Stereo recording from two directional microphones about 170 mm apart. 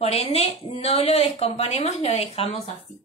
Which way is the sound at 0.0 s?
35° left (ahead or behind).